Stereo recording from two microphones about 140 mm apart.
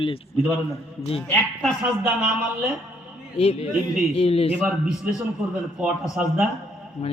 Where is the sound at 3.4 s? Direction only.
45° left (ahead or behind).